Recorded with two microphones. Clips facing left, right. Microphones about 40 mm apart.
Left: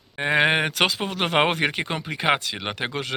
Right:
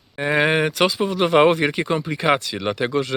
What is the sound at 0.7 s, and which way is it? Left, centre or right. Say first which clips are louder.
Speech: right 4 dB; left.